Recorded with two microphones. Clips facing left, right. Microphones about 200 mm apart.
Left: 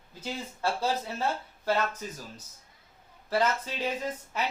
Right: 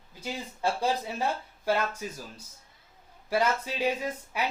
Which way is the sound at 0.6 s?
15° right (ahead or behind).